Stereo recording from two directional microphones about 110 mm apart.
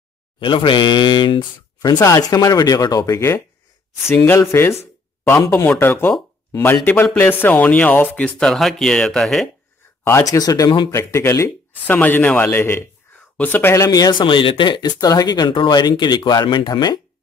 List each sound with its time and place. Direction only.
0.4 s speech: 50° left (ahead or behind)
2.0 s speech: 35° left (ahead or behind); by 8.3 s 15° left (ahead or behind)
8.4 s speech: centre (ahead or behind)
10.3 s speech: 30° left (ahead or behind)
11.7 s speech: 15° left (ahead or behind)
13.8 s speech: 35° left (ahead or behind)
14.2 s speech: 50° left (ahead or behind)